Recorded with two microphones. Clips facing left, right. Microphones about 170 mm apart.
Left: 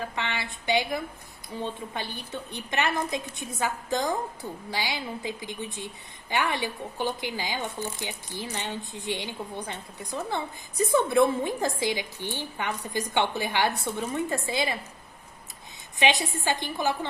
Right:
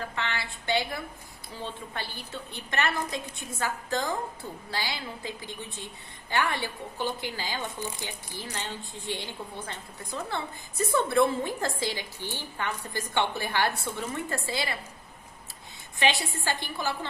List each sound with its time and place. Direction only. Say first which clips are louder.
0.0 s a woman's voice: left 1 dB; 20° left (ahead or behind)
16.0 s a woman's voice: left 2 dB; 20° left (ahead or behind)